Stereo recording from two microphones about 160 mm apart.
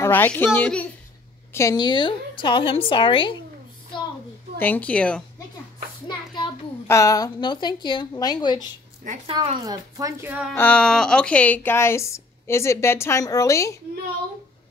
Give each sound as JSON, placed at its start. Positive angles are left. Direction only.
{"t": 0.0, "sound": "a woman's voice", "side_deg": 10}
{"t": 4.6, "sound": "speech", "side_deg": 10}
{"t": 6.0, "sound": "child singing", "side_deg": 30}
{"t": 6.9, "sound": "a woman's voice", "side_deg": 20}
{"t": 9.2, "sound": "a woman's voice", "side_deg": -35}
{"t": 9.9, "sound": "a woman's voice", "side_deg": -20}
{"t": 10.5, "sound": "speech", "side_deg": 10}